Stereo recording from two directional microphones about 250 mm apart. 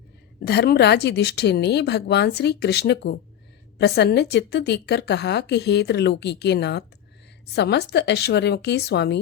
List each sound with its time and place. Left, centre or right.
0.3 s a woman's voice: left